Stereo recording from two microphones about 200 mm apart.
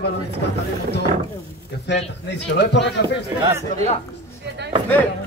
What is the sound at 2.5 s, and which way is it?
Speech, 60° left (ahead or behind).